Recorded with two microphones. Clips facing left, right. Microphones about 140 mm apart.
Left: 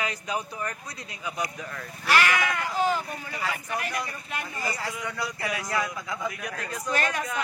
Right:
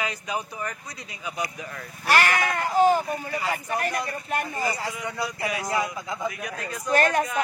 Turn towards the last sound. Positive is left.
turn(degrees=-45)  # may be behind; listen again after turning